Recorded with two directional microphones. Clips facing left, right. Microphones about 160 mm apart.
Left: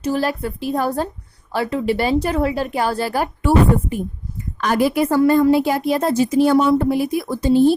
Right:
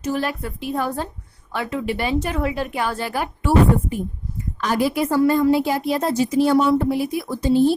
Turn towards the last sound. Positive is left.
turn(degrees=55)  # may be behind; listen again after turning